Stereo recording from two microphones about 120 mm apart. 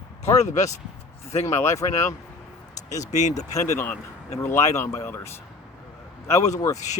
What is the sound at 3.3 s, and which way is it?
Speech, 25° left (ahead or behind).